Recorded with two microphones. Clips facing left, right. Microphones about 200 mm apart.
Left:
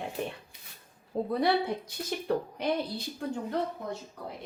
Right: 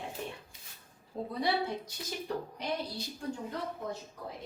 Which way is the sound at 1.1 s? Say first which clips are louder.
Left 5 dB; 65° left (ahead or behind).